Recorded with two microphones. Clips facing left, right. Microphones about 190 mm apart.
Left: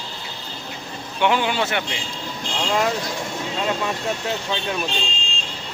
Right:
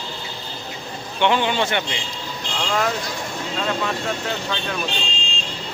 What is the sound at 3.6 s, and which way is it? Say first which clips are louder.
Speech: even; 15° left (ahead or behind).